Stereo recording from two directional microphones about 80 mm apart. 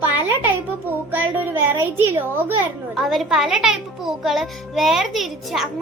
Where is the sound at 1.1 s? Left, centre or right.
Right.